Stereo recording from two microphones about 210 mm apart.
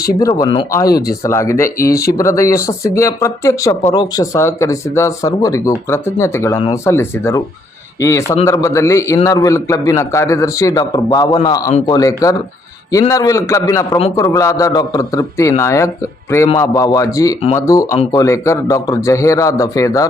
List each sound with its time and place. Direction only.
0.2 s a man's voice: 15° left (ahead or behind)